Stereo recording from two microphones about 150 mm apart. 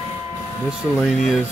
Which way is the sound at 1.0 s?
Centre (ahead or behind).